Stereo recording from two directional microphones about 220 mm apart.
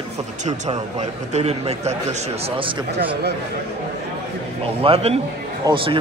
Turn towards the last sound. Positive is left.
turn(degrees=-15)  # may be behind; listen again after turning